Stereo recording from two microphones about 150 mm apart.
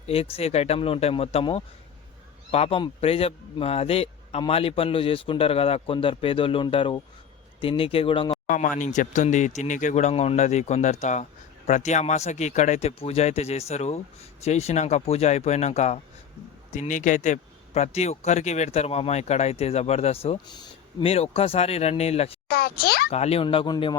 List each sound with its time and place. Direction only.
0.1 s speech: 40° left (ahead or behind)
8.4 s speech: 60° left (ahead or behind)
20.5 s a sound: 30° left (ahead or behind)
21.1 s speech: 40° left (ahead or behind)
22.4 s a child's voice: 90° left
23.1 s speech: 45° left (ahead or behind); by 24.0 s 30° left (ahead or behind)